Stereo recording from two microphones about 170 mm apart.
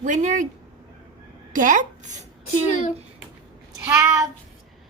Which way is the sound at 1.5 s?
50° right (ahead or behind).